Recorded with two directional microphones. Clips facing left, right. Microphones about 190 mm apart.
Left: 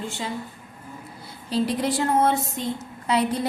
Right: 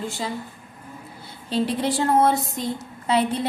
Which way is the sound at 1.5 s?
25° right (ahead or behind).